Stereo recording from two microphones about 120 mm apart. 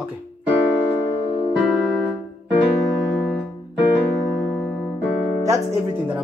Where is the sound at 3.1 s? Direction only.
10° right (ahead or behind).